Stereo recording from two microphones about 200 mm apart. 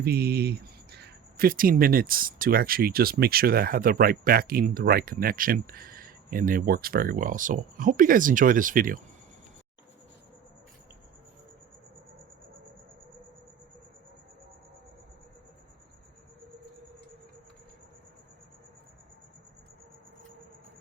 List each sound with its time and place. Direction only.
0.0 s speech: 50° right (ahead or behind)